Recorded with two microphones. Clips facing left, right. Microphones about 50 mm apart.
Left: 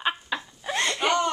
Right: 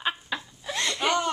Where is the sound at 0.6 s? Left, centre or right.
Left.